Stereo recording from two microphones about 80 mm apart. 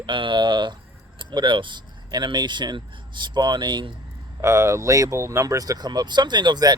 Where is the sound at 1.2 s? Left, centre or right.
Right.